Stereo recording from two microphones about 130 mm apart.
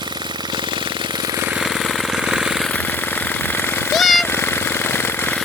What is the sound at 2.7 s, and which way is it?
Jackhammer, 15° left (ahead or behind).